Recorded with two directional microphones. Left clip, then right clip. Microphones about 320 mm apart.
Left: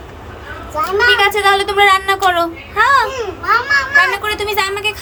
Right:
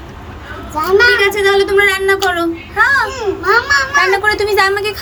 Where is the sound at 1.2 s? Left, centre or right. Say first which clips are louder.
Even; centre.